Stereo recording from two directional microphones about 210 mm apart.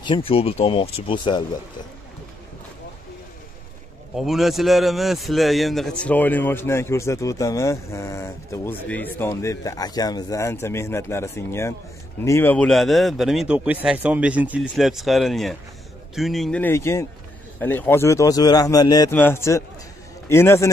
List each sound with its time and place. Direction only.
0.0 s speech: 25° left (ahead or behind)
4.1 s a man's voice: centre (ahead or behind)